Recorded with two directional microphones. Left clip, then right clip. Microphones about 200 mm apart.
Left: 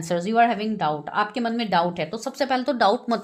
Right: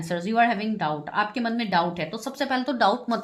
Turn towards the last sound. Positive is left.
turn(degrees=35)  # may be behind; listen again after turning